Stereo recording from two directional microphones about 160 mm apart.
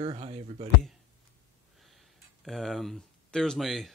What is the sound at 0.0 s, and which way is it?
Speech, 40° right (ahead or behind).